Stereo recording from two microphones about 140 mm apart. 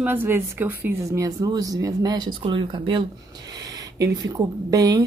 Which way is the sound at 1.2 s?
25° right (ahead or behind).